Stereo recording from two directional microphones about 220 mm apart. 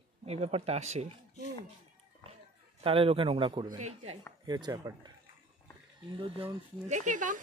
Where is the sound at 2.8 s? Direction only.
25° right (ahead or behind).